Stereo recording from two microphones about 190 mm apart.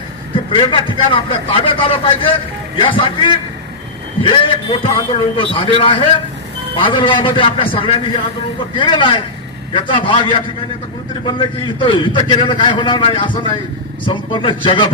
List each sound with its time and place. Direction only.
0.5 s a man's voice: 25° left (ahead or behind)